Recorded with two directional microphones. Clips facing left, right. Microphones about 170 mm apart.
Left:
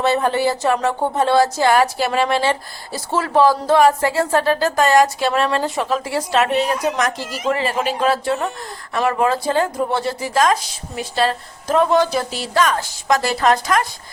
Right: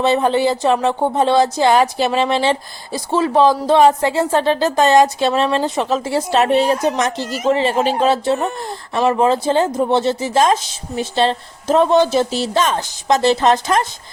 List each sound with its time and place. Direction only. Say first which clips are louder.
0.0 s speech: right 2 dB; 20° right (ahead or behind)
7.2 s speech: right 5 dB; centre (ahead or behind)
7.5 s speech: right 5 dB; 25° right (ahead or behind)